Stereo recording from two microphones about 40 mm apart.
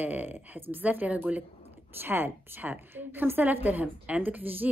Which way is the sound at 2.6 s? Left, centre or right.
Right.